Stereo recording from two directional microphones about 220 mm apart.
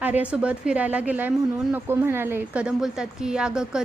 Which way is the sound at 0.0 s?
5° right (ahead or behind).